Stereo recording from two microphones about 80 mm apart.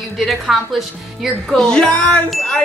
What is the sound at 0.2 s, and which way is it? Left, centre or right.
Speech, centre.